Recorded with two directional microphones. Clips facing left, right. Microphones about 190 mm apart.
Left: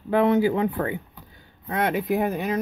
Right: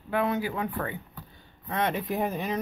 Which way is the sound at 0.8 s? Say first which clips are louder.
Left 6 dB; 15° left (ahead or behind).